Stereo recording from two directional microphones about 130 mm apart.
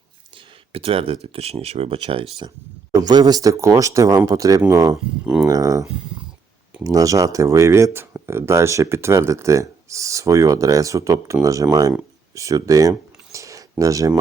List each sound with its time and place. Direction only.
0.3 s speech: 45° right (ahead or behind)
2.9 s speech: 30° right (ahead or behind)
5.2 s speech: 5° right (ahead or behind)
5.5 s speech: 25° right (ahead or behind)
12.3 s a sound: 25° right (ahead or behind)